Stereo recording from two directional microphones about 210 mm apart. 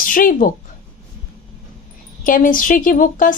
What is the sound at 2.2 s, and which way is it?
A woman's voice, 40° left (ahead or behind).